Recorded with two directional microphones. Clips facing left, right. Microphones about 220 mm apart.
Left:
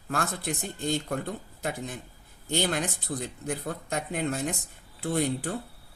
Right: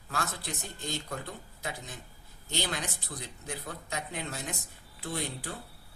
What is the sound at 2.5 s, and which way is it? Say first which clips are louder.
Speech: left 7 dB; 50° left (ahead or behind).